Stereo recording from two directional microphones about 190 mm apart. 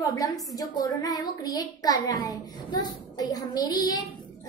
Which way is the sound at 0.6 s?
20° left (ahead or behind).